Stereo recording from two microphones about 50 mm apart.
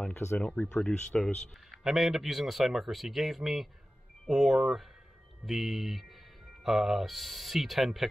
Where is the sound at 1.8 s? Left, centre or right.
Centre.